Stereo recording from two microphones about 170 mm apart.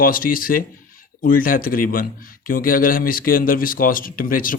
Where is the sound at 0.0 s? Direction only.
55° left (ahead or behind).